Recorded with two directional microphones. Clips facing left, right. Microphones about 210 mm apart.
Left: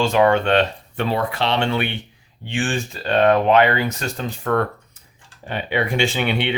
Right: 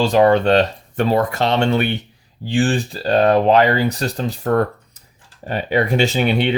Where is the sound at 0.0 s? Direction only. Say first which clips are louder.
Right 3 dB; 35° right (ahead or behind).